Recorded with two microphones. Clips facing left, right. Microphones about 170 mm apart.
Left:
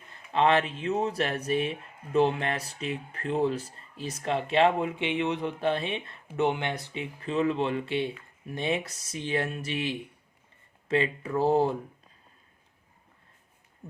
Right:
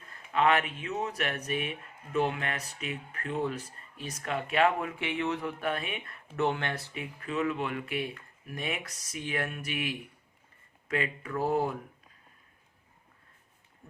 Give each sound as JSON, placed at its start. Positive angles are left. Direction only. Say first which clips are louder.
{"t": 0.1, "sound": "speech", "louder": "left 2 dB", "side_deg": 30}